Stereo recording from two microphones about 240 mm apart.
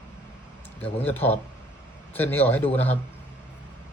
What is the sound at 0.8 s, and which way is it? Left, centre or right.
A man's voice, centre.